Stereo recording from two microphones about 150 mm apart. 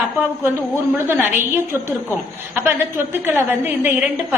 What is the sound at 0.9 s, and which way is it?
Speech, 15° right (ahead or behind).